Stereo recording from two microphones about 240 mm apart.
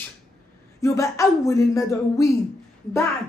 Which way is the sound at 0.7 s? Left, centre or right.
Centre.